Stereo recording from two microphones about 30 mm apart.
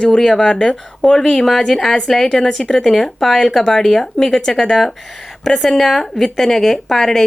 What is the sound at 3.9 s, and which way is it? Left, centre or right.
Speech, centre.